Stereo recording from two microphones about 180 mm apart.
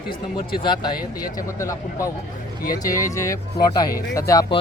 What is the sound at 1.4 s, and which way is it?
Speech, 15° left (ahead or behind).